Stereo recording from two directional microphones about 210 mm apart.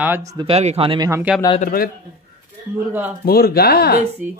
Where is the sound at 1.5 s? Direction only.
45° left (ahead or behind).